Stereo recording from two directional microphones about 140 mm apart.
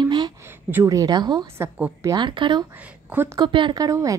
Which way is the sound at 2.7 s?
10° right (ahead or behind).